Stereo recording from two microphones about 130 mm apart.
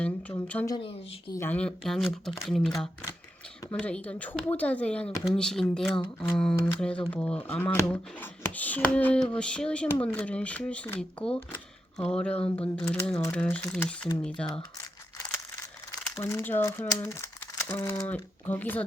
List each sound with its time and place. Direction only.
0.0 s speech: 10° left (ahead or behind)
16.2 s speech: 15° left (ahead or behind)